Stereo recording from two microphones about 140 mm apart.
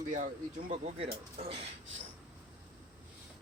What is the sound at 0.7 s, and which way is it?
Speech, 45° right (ahead or behind).